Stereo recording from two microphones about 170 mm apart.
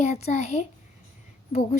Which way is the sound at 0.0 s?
40° left (ahead or behind).